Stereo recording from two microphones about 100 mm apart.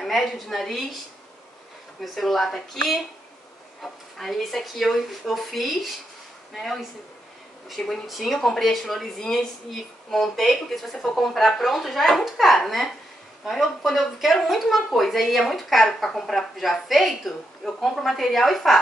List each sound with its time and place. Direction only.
0.0 s speech: centre (ahead or behind)
2.1 s speech: centre (ahead or behind)